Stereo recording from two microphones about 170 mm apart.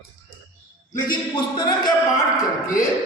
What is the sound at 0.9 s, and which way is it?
Speech, 55° left (ahead or behind).